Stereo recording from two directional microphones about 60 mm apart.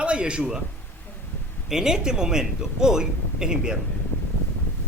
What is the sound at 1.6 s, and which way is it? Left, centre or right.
Speech, centre.